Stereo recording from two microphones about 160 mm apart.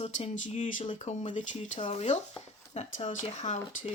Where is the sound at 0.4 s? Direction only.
50° left (ahead or behind).